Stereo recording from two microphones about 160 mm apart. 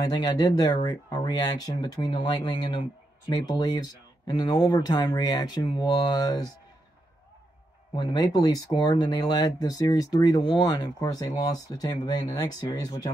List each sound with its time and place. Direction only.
0.0 s speech: 25° left (ahead or behind)
7.9 s speech: 25° left (ahead or behind)